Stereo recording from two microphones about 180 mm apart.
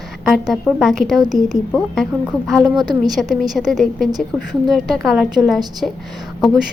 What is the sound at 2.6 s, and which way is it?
Speech, 20° right (ahead or behind).